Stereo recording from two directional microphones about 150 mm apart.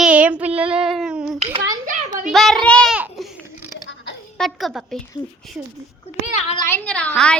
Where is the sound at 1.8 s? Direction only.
60° right (ahead or behind).